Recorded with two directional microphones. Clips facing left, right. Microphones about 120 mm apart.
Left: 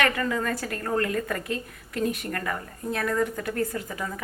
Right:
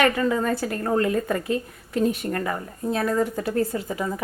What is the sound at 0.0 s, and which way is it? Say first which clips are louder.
A woman's voice: right 5 dB; 20° right (ahead or behind).